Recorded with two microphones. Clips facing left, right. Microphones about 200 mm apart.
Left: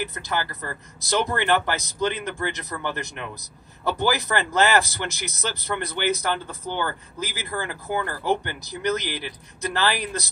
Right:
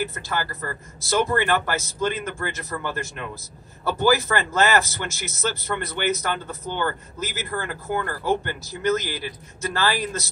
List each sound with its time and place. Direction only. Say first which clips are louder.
0.0 s speech: right 1 dB; 15° left (ahead or behind)